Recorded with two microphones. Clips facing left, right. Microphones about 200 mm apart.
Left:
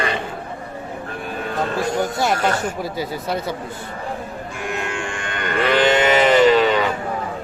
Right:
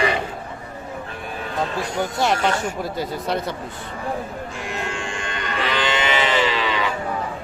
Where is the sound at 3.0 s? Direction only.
5° left (ahead or behind).